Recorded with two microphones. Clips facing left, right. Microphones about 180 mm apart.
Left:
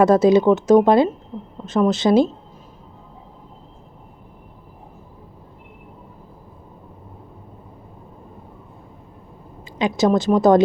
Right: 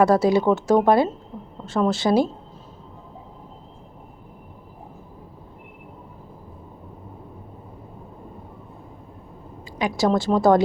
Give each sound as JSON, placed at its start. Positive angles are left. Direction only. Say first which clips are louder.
{"t": 0.0, "sound": "speech", "louder": "left 4 dB", "side_deg": 20}
{"t": 9.7, "sound": "speech", "louder": "left 3 dB", "side_deg": 20}